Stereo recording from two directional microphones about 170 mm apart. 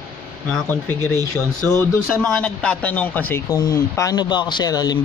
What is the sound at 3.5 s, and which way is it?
Speech, 20° left (ahead or behind).